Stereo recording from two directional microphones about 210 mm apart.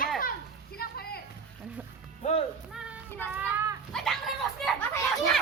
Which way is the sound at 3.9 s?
Centre (ahead or behind).